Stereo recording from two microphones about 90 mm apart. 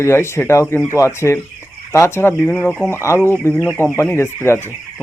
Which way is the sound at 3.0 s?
30° left (ahead or behind).